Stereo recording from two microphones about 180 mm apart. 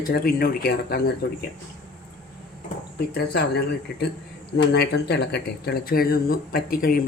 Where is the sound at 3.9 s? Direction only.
65° left (ahead or behind).